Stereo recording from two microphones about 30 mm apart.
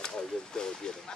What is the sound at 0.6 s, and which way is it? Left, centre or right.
Speech, left.